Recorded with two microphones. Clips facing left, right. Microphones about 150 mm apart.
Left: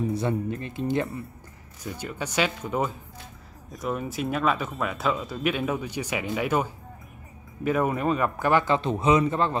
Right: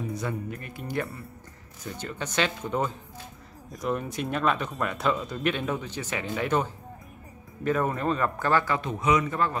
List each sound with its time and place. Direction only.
0.1 s a man's voice: 30° left (ahead or behind)
1.9 s a man's voice: 10° left (ahead or behind); by 9.6 s 25° left (ahead or behind)